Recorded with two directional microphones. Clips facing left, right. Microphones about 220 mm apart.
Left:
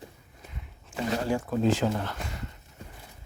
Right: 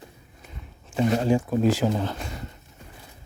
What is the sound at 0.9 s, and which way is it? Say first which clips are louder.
Speech: right 7 dB; 20° right (ahead or behind).